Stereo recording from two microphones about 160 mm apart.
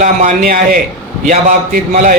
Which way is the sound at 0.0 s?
55° right (ahead or behind).